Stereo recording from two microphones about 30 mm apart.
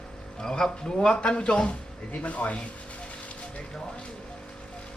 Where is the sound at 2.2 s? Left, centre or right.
Left.